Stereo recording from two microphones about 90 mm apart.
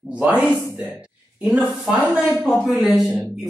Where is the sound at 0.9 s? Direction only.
10° right (ahead or behind).